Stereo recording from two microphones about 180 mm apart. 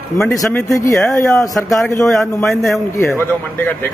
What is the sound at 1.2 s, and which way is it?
A man's voice, centre (ahead or behind).